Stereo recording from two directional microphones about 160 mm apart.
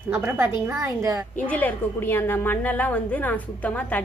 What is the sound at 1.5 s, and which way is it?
A woman's voice, 10° left (ahead or behind).